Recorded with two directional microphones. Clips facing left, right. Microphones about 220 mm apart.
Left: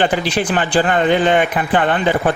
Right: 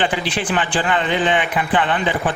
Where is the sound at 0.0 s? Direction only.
40° left (ahead or behind).